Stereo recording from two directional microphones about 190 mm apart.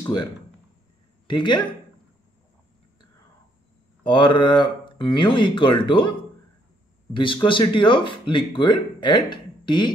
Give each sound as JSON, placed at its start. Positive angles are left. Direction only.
{"t": 0.0, "sound": "speech", "side_deg": 20}
{"t": 4.0, "sound": "speech", "side_deg": 25}
{"t": 7.2, "sound": "speech", "side_deg": 25}